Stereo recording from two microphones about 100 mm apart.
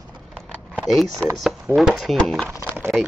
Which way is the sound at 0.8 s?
Centre (ahead or behind).